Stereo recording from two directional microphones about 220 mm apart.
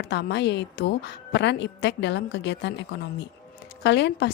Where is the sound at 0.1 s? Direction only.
50° left (ahead or behind).